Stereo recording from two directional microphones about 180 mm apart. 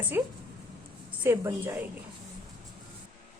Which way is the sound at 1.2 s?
15° right (ahead or behind).